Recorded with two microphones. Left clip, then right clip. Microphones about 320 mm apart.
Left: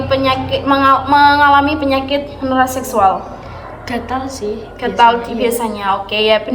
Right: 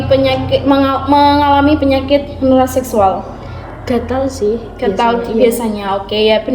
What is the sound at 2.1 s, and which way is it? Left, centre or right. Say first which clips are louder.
Speech: right 5 dB; centre.